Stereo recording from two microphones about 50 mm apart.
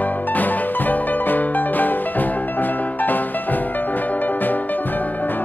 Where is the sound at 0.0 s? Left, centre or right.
Left.